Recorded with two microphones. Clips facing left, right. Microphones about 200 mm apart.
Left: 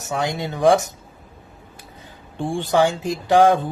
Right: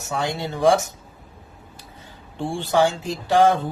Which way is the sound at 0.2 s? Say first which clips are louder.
Left 1 dB; 15° left (ahead or behind).